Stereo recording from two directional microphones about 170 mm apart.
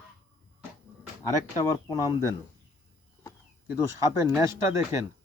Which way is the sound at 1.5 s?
20° left (ahead or behind).